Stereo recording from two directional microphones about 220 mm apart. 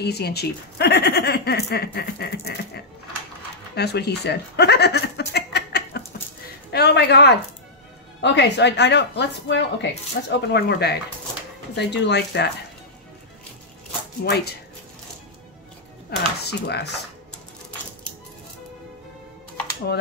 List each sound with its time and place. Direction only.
0.0 s speech: 45° left (ahead or behind)
3.7 s chuckle: 50° left (ahead or behind)
6.7 s speech: 50° left (ahead or behind)
14.2 s speech: 45° left (ahead or behind)
16.4 s speech: 50° left (ahead or behind)